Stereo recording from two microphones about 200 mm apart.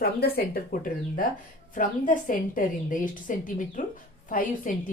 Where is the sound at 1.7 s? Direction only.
40° left (ahead or behind).